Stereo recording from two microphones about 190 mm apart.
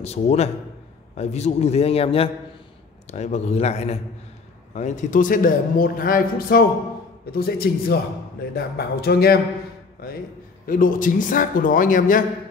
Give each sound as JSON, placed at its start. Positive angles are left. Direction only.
{"t": 0.0, "sound": "a man's voice", "side_deg": 35}
{"t": 10.7, "sound": "a man's voice", "side_deg": 45}